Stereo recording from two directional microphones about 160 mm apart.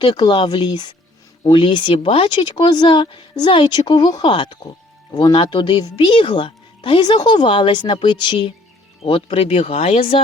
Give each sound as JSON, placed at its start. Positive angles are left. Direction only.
{"t": 0.0, "sound": "speech", "side_deg": 25}